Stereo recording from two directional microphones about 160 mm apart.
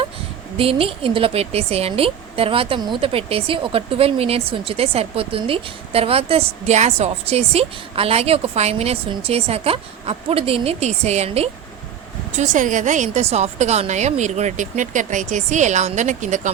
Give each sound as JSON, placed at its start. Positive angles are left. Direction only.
{"t": 0.5, "sound": "speech", "side_deg": -35}
{"t": 12.4, "sound": "a woman's voice", "side_deg": -55}